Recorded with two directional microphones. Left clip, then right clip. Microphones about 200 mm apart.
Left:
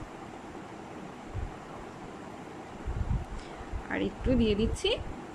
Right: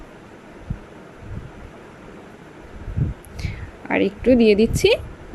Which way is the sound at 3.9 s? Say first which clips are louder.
Right 14 dB; 25° right (ahead or behind).